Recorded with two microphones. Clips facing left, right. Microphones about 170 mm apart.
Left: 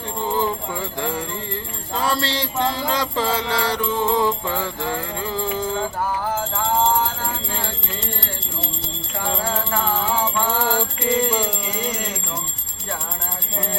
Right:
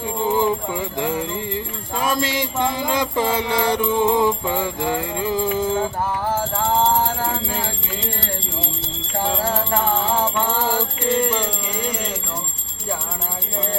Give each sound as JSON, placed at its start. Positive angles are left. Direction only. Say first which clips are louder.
{"t": 0.2, "sound": "jingle bell", "louder": "right 3 dB", "side_deg": -15}
{"t": 11.0, "sound": "music", "louder": "right 1 dB", "side_deg": 5}